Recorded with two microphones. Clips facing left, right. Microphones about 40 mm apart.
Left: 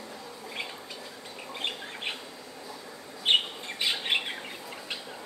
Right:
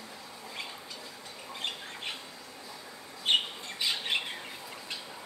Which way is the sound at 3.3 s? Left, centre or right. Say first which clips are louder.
Left 3 dB; left.